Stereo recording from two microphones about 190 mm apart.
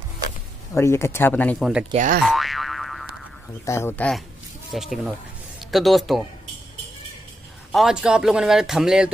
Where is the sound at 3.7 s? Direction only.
15° left (ahead or behind).